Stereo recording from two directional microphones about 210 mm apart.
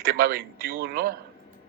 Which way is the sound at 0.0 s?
45° right (ahead or behind).